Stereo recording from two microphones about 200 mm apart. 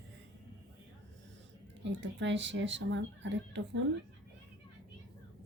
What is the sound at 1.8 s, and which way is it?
Speech, 65° right (ahead or behind).